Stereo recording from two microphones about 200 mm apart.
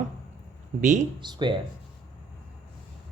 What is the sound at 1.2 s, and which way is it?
Speech, 20° right (ahead or behind).